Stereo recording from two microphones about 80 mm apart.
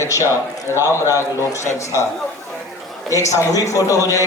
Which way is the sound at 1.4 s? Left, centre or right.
Left.